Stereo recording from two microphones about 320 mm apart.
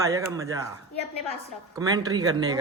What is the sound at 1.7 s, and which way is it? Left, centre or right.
Speech, centre.